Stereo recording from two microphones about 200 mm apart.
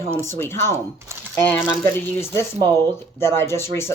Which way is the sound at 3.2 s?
10° left (ahead or behind).